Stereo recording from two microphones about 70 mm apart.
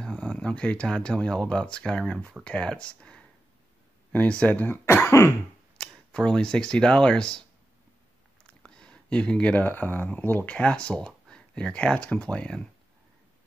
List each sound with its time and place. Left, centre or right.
0.0 s speech: centre
4.8 s throat clearing: left
5.8 s speech: centre
8.6 s a sound: centre
9.7 s speech: left